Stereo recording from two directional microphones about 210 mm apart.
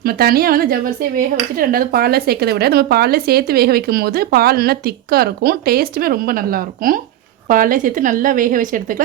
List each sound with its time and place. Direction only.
0.0 s a woman's voice: 45° right (ahead or behind)